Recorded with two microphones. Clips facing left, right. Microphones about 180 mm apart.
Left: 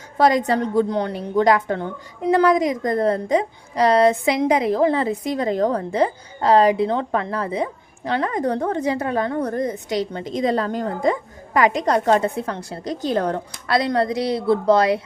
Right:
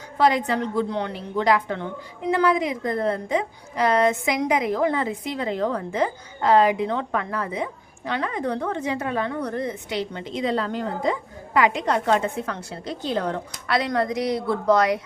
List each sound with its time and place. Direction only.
0.2 s a woman's voice: 40° left (ahead or behind)